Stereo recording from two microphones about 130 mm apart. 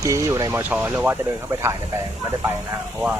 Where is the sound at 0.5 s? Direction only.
15° right (ahead or behind).